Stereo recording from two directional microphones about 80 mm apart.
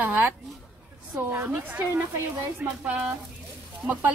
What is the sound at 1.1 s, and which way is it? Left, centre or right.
A woman's voice, right.